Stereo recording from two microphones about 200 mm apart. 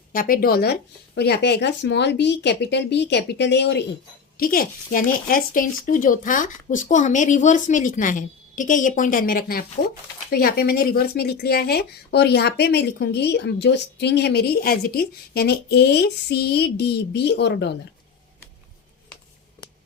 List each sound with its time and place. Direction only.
0.1 s speech: 45° left (ahead or behind)
4.4 s speech: 45° left (ahead or behind)